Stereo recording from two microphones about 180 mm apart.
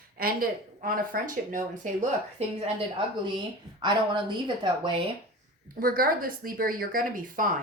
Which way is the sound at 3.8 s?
25° right (ahead or behind).